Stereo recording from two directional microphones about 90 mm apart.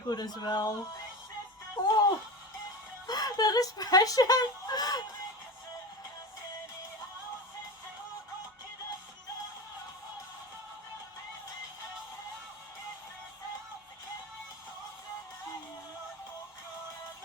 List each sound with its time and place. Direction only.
0.0 s speech: 50° left (ahead or behind)
1.7 s speech: 45° left (ahead or behind)